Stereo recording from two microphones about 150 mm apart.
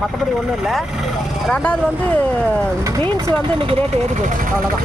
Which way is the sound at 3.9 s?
45° right (ahead or behind).